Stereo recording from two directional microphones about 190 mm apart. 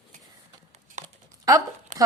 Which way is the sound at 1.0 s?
35° right (ahead or behind).